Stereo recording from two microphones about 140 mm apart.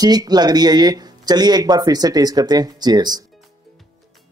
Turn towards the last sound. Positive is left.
turn(degrees=-30)  # may be behind; listen again after turning